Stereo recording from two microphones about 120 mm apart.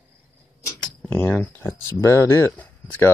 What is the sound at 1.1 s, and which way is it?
Speech, 15° left (ahead or behind).